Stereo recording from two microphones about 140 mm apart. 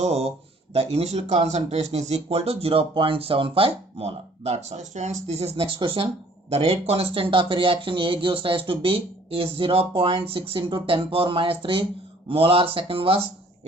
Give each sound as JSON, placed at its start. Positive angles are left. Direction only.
{"t": 0.0, "sound": "speech", "side_deg": -50}